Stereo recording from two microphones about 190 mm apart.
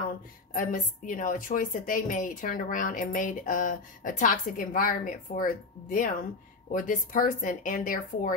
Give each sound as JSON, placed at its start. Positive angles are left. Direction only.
{"t": 0.5, "sound": "a woman's voice", "side_deg": 45}